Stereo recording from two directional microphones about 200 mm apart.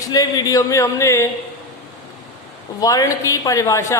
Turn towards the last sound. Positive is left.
turn(degrees=15)  # may be behind; listen again after turning